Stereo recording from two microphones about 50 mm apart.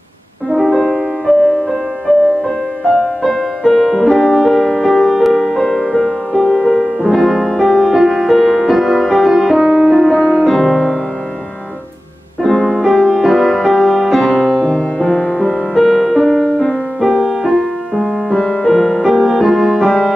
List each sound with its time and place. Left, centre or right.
0.6 s music: centre
1.3 s music: centre
2.9 s music: centre
4.6 s music: centre
6.5 s music: centre
7.0 s music: centre
10.4 s music: centre
12.6 s music: centre
12.9 s music: centre
14.4 s music: centre
15.7 s music: centre
16.3 s music: centre
17.0 s music: centre